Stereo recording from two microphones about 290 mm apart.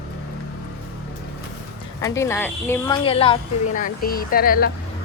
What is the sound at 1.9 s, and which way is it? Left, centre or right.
Speech, centre.